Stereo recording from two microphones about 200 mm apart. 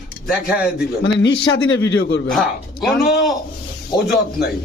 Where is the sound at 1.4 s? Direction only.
70° left (ahead or behind).